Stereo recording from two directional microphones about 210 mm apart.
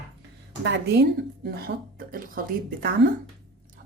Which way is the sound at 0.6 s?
55° right (ahead or behind).